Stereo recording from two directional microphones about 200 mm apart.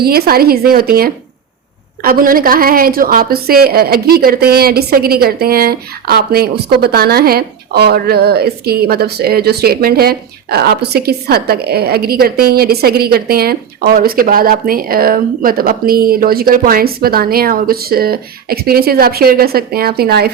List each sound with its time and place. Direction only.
0.0 s a woman's voice: 50° right (ahead or behind)